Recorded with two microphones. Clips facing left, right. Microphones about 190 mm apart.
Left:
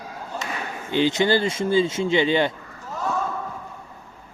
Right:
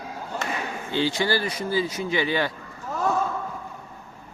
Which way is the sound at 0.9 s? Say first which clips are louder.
Left 5 dB; 20° left (ahead or behind).